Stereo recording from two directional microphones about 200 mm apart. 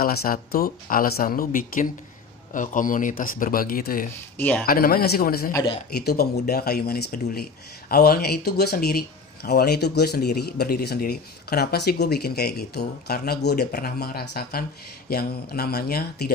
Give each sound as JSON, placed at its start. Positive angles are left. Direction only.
{"t": 0.0, "sound": "speech", "side_deg": 50}
{"t": 4.4, "sound": "speech", "side_deg": 10}
{"t": 4.6, "sound": "speech", "side_deg": 45}
{"t": 5.5, "sound": "speech", "side_deg": 20}
{"t": 5.9, "sound": "speech", "side_deg": 50}